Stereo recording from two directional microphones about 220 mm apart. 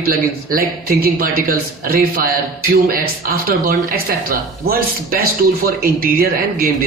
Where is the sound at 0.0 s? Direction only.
40° right (ahead or behind).